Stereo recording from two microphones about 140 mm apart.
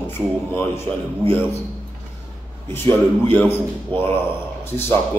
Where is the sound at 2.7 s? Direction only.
15° left (ahead or behind).